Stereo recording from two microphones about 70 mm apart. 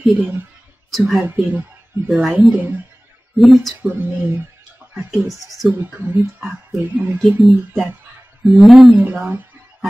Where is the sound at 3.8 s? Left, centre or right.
Right.